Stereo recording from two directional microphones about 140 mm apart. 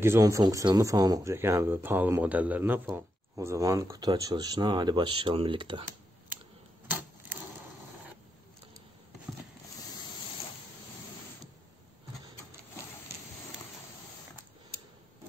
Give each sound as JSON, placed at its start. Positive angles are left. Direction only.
{"t": 0.0, "sound": "speech", "side_deg": -20}